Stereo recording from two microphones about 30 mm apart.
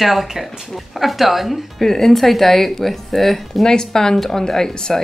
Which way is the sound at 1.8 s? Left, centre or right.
Centre.